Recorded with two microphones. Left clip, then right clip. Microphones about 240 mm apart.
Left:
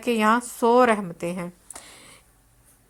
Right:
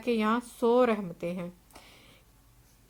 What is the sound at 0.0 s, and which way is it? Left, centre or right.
A woman's voice, centre.